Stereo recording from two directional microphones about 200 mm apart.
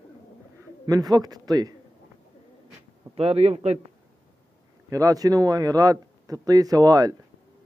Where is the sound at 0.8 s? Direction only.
20° right (ahead or behind).